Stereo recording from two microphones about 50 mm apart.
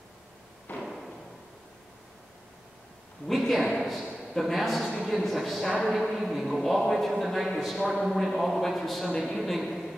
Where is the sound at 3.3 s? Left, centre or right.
Centre.